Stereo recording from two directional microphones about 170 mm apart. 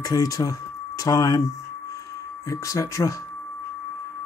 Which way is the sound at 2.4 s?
20° left (ahead or behind).